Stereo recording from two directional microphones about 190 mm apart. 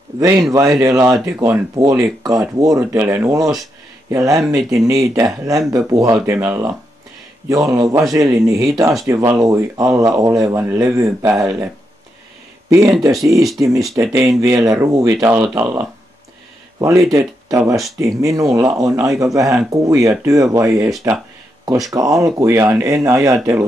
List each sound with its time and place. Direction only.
0.2 s speech: 20° right (ahead or behind)
17.1 s speech: 15° right (ahead or behind)
21.9 s speech: 15° right (ahead or behind)